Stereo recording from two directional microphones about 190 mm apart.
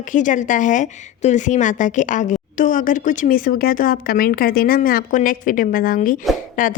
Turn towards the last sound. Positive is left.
turn(degrees=45)  # may be behind; listen again after turning